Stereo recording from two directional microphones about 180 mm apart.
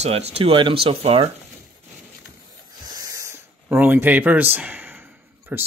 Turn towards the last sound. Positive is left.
turn(degrees=-10)  # may be behind; listen again after turning